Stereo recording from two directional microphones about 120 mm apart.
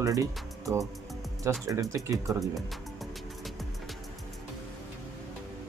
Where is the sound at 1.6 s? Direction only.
25° right (ahead or behind).